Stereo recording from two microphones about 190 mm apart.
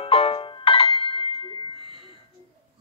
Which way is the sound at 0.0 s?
30° left (ahead or behind).